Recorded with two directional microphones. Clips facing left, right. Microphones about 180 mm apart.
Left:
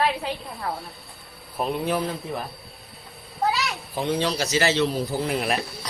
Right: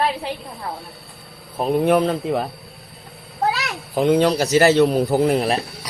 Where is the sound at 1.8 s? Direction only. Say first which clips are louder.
Right 9 dB; 70° right (ahead or behind).